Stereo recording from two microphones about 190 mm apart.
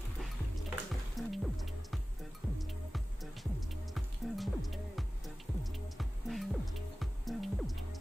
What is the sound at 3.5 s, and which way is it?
Music, centre (ahead or behind).